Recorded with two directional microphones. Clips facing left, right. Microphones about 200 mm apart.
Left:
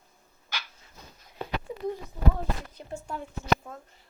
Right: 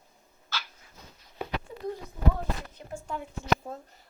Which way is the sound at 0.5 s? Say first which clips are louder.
Right 2 dB; 15° left (ahead or behind).